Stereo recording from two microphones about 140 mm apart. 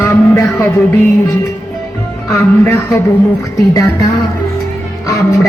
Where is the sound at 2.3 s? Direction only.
15° left (ahead or behind).